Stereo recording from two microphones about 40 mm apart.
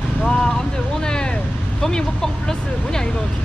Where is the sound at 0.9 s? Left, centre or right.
Centre.